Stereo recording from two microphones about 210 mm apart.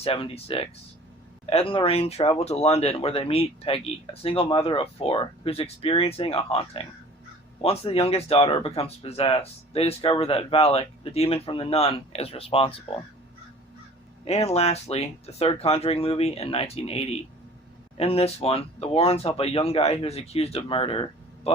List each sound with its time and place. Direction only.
0.0 s speech: 25° left (ahead or behind)
14.3 s speech: 30° left (ahead or behind)